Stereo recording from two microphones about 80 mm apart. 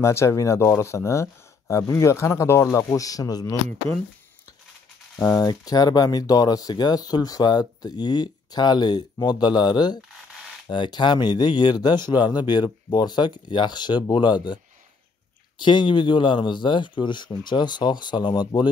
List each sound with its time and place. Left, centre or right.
0.0 s speech: left
5.4 s speech: left
10.7 s speech: left
15.6 s speech: left